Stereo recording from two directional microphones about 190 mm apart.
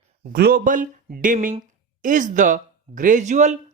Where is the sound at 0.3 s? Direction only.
50° right (ahead or behind).